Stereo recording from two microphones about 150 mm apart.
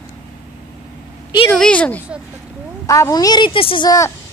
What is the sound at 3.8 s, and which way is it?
Speech, 20° left (ahead or behind).